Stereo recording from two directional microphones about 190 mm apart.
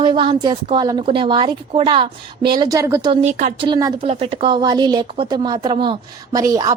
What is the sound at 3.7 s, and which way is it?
Speech, 20° right (ahead or behind).